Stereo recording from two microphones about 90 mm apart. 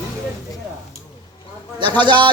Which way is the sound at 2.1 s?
60° right (ahead or behind).